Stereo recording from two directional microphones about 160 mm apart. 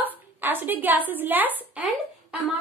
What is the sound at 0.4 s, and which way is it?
A woman's voice, 10° right (ahead or behind).